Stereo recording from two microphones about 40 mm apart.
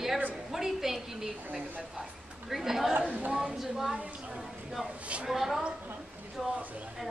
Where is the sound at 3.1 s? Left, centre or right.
Right.